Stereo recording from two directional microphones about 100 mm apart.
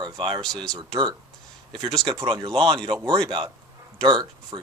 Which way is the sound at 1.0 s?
50° right (ahead or behind).